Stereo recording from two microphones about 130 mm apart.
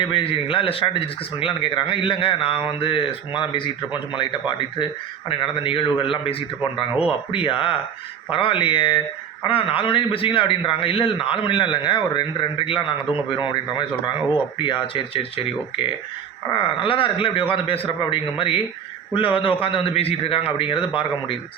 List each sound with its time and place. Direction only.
0.0 s a man's voice: 40° left (ahead or behind)
16.5 s speech: 40° left (ahead or behind)